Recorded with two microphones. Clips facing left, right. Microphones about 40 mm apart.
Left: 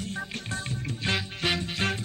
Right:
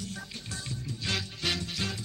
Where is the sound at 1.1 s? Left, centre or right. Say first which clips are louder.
Left 3 dB; left.